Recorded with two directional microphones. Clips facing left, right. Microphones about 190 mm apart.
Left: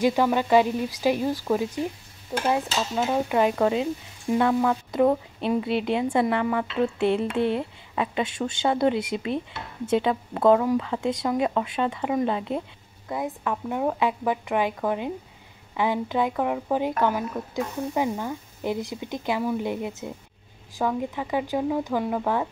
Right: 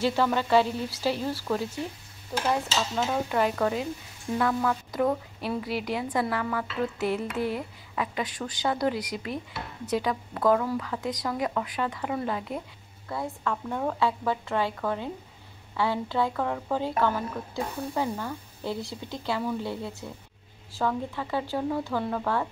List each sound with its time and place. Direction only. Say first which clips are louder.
0.0 s speech: left 4 dB; 15° left (ahead or behind)
3.0 s speech: left 4 dB; 15° left (ahead or behind)